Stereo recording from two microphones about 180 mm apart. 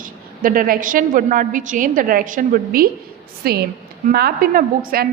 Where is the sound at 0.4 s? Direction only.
50° right (ahead or behind).